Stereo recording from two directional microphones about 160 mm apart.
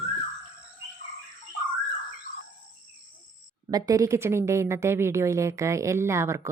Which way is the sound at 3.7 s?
20° right (ahead or behind).